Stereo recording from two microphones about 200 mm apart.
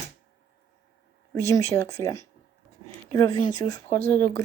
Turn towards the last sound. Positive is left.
turn(degrees=10)  # may be behind; listen again after turning